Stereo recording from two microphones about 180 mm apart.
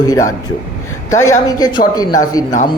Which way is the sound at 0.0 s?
20° left (ahead or behind).